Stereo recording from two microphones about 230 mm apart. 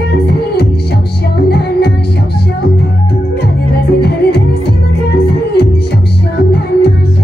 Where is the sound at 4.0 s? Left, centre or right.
Left.